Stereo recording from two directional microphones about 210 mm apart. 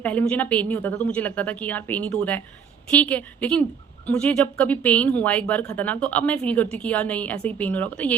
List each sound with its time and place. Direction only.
0.0 s a woman's voice: 5° left (ahead or behind)